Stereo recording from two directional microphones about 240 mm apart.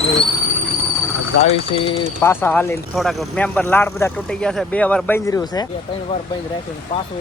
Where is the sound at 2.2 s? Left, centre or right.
Centre.